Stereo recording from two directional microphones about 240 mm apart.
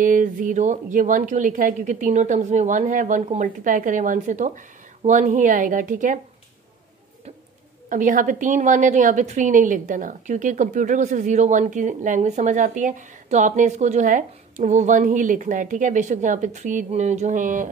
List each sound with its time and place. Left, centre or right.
0.0 s a woman's voice: right
7.9 s a woman's voice: right